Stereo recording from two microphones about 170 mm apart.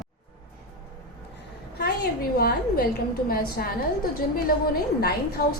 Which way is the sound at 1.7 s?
60° left (ahead or behind).